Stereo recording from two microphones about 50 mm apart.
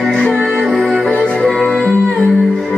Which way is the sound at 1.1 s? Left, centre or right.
Centre.